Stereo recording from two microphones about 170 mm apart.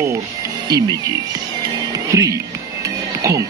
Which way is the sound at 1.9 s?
20° right (ahead or behind).